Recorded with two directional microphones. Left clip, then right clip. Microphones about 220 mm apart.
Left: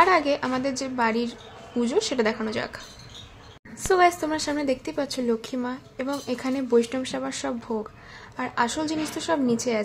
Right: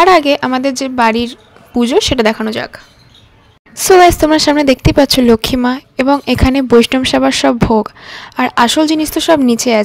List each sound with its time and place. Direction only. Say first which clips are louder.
0.0 s a woman's voice: right 12 dB; 40° right (ahead or behind)
3.7 s a woman's voice: right 14 dB; 40° right (ahead or behind)